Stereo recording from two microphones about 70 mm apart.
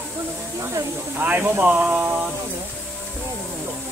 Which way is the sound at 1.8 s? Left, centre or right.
Centre.